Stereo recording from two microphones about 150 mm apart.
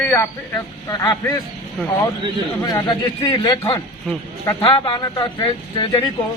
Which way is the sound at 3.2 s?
30° left (ahead or behind).